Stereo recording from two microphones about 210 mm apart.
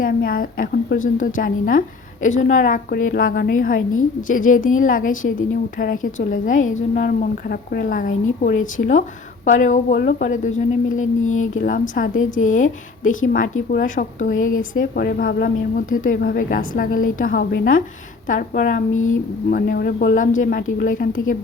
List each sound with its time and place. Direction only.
0.0 s speech: 40° left (ahead or behind)
12.2 s speech: 70° left (ahead or behind)
12.5 s speech: 40° left (ahead or behind)